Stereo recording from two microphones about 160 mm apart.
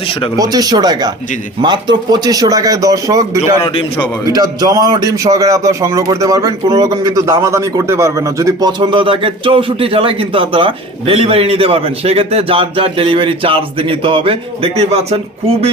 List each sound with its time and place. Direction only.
0.3 s speech: 25° right (ahead or behind)
3.6 s a man's voice: 35° left (ahead or behind)
4.3 s a man's voice: 25° right (ahead or behind); by 15.7 s 40° right (ahead or behind)